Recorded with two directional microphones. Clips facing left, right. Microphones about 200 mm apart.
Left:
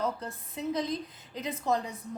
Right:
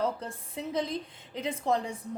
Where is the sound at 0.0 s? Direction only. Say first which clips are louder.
Right 2 dB; 30° right (ahead or behind).